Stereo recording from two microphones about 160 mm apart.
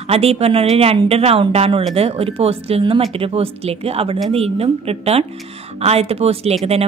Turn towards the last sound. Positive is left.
turn(degrees=-40)  # may be behind; listen again after turning